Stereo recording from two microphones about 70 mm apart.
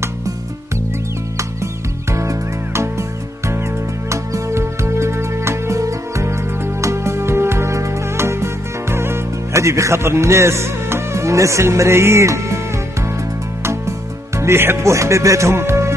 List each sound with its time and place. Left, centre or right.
2.1 s music: right
14.4 s speech: right